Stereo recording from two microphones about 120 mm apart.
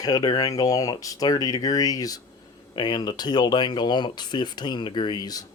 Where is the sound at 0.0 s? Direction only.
35° left (ahead or behind).